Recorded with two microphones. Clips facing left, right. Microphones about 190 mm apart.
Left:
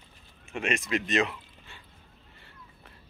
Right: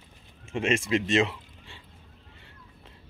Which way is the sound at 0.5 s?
30° right (ahead or behind).